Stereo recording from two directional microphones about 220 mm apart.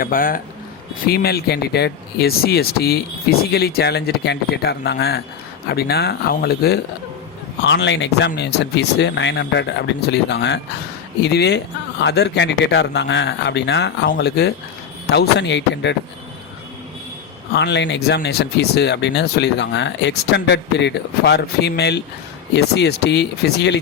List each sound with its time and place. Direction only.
0.0 s speech: 40° left (ahead or behind)
17.5 s speech: 50° left (ahead or behind)